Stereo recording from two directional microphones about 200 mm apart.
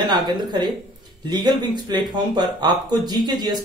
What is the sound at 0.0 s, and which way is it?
A woman's voice, 20° right (ahead or behind).